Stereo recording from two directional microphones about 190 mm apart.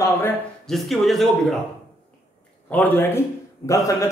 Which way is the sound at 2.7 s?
10° left (ahead or behind).